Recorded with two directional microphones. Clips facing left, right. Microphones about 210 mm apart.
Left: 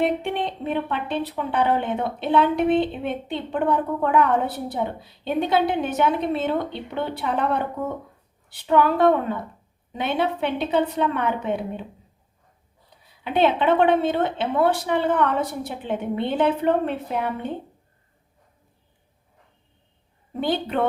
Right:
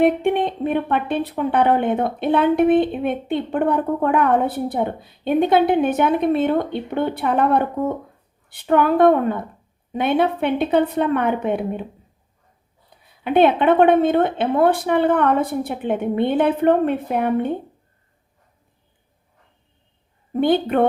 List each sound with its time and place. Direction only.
0.0 s a woman's voice: 55° right (ahead or behind)
13.2 s speech: 55° right (ahead or behind)
20.4 s speech: 55° right (ahead or behind)